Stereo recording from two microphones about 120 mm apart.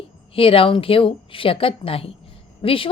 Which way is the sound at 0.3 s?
50° left (ahead or behind).